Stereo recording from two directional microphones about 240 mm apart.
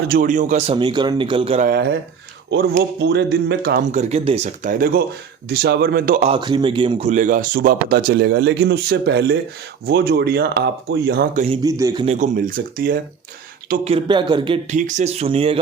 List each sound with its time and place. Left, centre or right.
0.1 s speech: right
1.6 s speech: right
11.5 s a man's voice: centre
12.0 s speech: right
13.8 s speech: right